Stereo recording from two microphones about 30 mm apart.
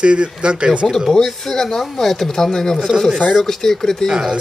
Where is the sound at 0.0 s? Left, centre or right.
Right.